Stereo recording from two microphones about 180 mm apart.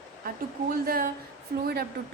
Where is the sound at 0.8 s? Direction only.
55° right (ahead or behind).